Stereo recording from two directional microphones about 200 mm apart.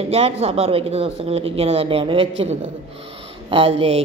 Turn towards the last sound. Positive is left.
turn(degrees=-30)  # may be behind; listen again after turning